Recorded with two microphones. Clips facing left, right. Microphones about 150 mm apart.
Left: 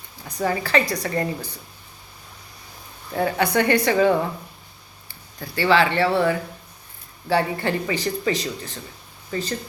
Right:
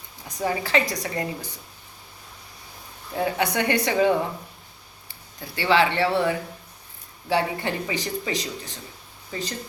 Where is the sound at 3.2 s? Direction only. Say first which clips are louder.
Left 3 dB; 15° right (ahead or behind).